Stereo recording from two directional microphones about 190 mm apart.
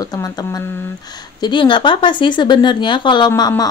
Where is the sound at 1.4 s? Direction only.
25° left (ahead or behind).